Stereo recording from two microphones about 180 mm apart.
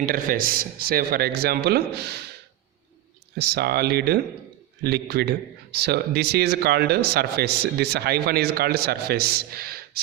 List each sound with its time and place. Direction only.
0.0 s speech: 50° right (ahead or behind)
3.3 s speech: 65° right (ahead or behind)